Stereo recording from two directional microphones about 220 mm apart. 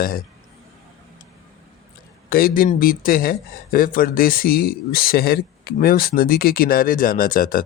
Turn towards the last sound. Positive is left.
turn(degrees=40)  # may be behind; listen again after turning